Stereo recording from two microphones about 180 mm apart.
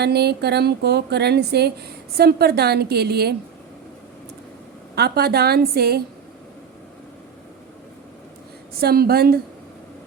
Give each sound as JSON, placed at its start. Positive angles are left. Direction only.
{"t": 0.0, "sound": "a woman's voice", "side_deg": -65}
{"t": 4.9, "sound": "a woman's voice", "side_deg": -60}
{"t": 8.7, "sound": "a woman's voice", "side_deg": -60}